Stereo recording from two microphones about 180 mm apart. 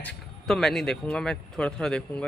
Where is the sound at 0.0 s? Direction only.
Centre (ahead or behind).